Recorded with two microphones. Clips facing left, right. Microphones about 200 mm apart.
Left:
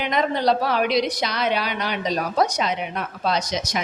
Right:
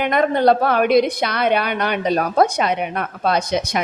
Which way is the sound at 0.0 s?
55° right (ahead or behind).